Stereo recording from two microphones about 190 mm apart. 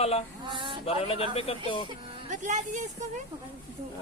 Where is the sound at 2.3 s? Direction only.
40° right (ahead or behind).